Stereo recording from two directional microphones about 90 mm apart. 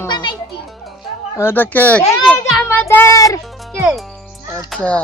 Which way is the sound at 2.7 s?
25° left (ahead or behind).